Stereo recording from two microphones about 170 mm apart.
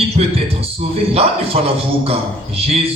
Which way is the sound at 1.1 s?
35° right (ahead or behind).